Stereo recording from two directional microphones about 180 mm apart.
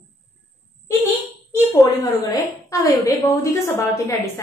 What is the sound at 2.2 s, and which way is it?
Speech, 20° left (ahead or behind).